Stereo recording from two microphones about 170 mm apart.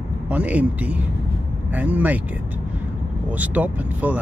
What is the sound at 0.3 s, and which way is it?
Speech, 10° right (ahead or behind).